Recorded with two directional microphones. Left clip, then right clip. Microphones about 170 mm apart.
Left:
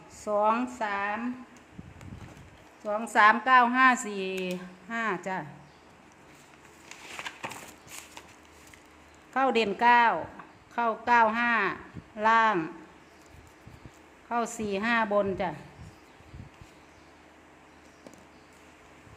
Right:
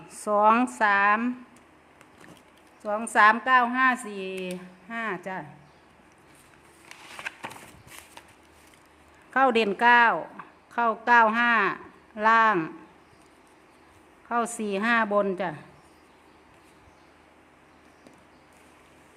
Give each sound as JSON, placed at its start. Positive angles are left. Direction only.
{"t": 0.1, "sound": "speech", "side_deg": -30}
{"t": 2.8, "sound": "a woman's voice", "side_deg": -25}
{"t": 9.3, "sound": "speech", "side_deg": -25}
{"t": 14.3, "sound": "a woman's voice", "side_deg": -25}